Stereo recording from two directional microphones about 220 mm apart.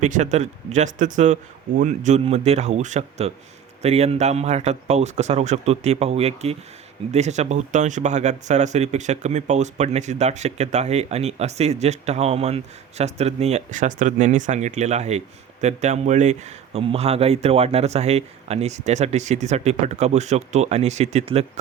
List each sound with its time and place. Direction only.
0.0 s speech: 35° right (ahead or behind)